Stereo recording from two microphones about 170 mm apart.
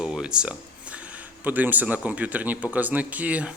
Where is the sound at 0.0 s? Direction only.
5° right (ahead or behind).